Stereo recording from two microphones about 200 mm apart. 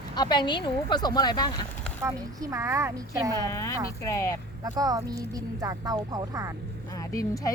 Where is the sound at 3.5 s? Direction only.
15° left (ahead or behind).